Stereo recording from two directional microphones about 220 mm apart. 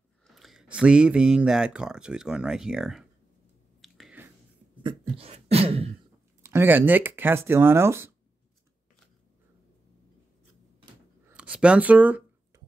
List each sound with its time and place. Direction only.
0.3 s speech: centre (ahead or behind)
3.8 s a sound: centre (ahead or behind)
4.8 s beatboxing: 25° right (ahead or behind)
6.4 s speech: 10° right (ahead or behind)
11.2 s writing: 5° right (ahead or behind)